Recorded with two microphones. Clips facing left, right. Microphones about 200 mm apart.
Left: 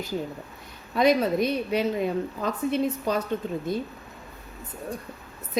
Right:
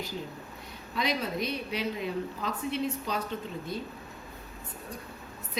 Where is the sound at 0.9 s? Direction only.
50° left (ahead or behind).